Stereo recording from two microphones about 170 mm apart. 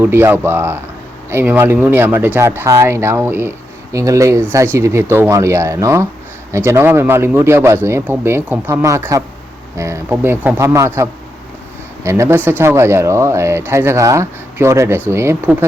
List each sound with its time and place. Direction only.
0.0 s speech: 15° right (ahead or behind)